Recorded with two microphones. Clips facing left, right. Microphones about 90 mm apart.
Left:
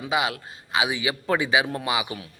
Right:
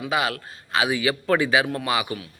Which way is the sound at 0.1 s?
15° left (ahead or behind).